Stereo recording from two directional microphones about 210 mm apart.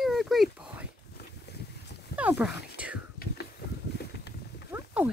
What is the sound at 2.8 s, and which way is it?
Whispering, 5° right (ahead or behind).